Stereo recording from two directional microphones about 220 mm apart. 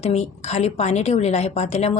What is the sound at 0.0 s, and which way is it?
A woman's voice, 30° left (ahead or behind).